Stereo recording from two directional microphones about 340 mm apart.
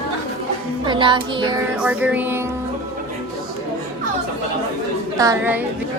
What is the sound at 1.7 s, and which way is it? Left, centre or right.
Speech, centre.